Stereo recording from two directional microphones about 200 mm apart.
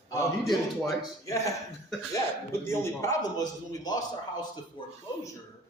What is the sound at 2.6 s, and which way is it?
A man's voice, 15° left (ahead or behind).